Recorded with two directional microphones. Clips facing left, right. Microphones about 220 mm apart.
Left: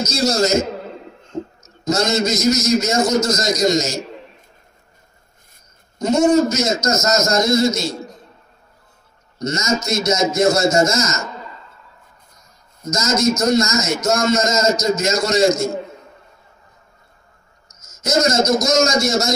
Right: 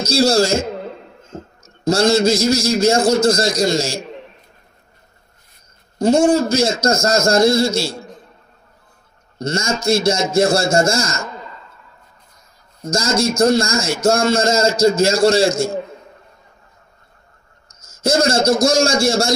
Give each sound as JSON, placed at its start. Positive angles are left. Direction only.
{"t": 0.0, "sound": "a man's voice", "side_deg": -30}
{"t": 5.9, "sound": "a man's voice", "side_deg": -30}
{"t": 9.4, "sound": "a man's voice", "side_deg": -30}
{"t": 12.8, "sound": "a man's voice", "side_deg": -30}
{"t": 17.6, "sound": "a man's voice", "side_deg": -30}